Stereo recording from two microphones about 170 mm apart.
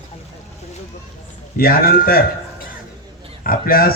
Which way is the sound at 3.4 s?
60° left (ahead or behind).